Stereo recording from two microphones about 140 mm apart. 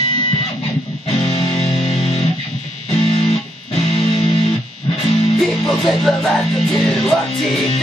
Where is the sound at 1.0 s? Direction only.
45° left (ahead or behind).